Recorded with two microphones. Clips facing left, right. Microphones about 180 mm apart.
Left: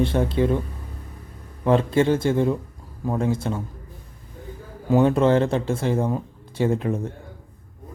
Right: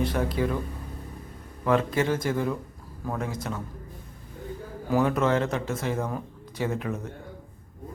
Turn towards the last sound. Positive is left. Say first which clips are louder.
# left 7 dB
turn(degrees=30)  # may be behind; listen again after turning